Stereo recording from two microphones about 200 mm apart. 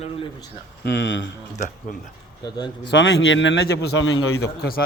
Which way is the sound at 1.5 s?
35° left (ahead or behind).